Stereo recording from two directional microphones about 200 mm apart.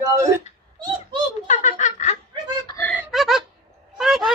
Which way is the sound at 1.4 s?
35° left (ahead or behind).